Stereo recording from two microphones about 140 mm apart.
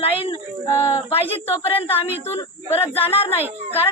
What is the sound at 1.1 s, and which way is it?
Speech, 45° left (ahead or behind).